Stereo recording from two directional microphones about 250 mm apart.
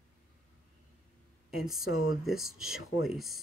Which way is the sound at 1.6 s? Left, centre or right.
Centre.